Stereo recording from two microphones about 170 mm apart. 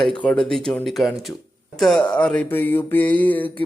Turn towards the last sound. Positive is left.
turn(degrees=10)  # may be behind; listen again after turning